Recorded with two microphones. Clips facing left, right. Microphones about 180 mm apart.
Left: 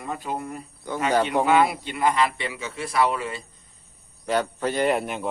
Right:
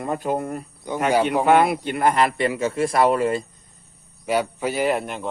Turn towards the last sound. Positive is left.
turn(degrees=0)  # may be behind; listen again after turning